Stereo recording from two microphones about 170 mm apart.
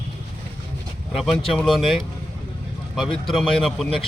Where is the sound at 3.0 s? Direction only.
Centre (ahead or behind).